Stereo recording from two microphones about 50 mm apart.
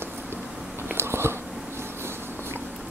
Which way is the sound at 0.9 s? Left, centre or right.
Right.